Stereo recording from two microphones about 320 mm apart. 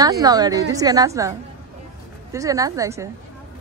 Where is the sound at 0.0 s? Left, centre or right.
Centre.